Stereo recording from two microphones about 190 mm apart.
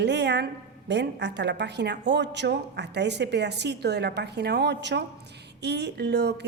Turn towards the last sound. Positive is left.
turn(degrees=-60)  # may be behind; listen again after turning